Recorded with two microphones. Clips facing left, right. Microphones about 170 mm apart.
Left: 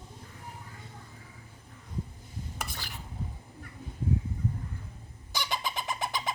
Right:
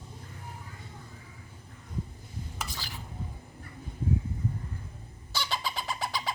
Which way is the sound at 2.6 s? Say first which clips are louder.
Even; 60° left (ahead or behind).